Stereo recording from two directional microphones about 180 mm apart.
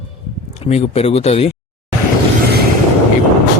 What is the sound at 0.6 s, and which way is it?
Speech, 35° left (ahead or behind).